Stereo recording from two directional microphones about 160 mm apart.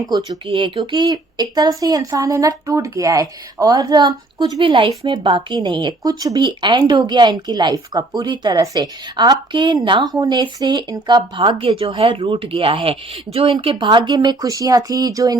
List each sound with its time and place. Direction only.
0.1 s a woman's voice: 25° right (ahead or behind)